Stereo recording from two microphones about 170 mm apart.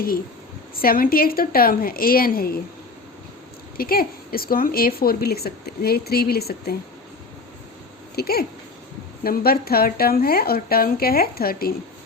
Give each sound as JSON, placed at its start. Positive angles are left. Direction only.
{"t": 0.8, "sound": "a woman's voice", "side_deg": 60}
{"t": 3.8, "sound": "a woman's voice", "side_deg": 60}
{"t": 8.1, "sound": "a woman's voice", "side_deg": 65}